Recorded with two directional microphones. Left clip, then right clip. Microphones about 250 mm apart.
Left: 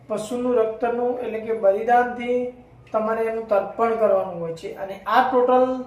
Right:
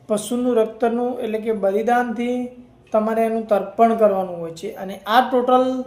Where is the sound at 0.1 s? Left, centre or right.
Right.